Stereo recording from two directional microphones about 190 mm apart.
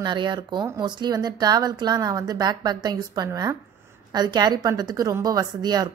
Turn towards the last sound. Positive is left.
turn(degrees=-20)  # may be behind; listen again after turning